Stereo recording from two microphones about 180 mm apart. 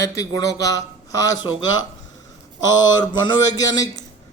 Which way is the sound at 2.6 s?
25° left (ahead or behind).